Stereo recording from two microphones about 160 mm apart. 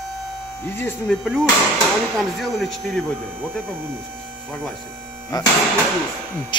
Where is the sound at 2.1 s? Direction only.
Centre (ahead or behind).